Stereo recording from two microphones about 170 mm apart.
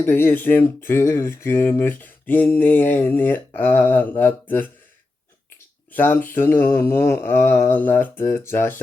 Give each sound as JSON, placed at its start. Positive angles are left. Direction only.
{"t": 0.0, "sound": "speech", "side_deg": 15}